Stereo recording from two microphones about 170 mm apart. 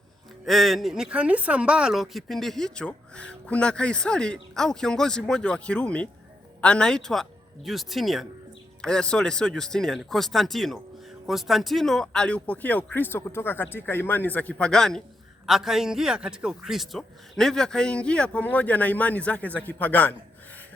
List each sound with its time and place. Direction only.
0.4 s a man's voice: centre (ahead or behind)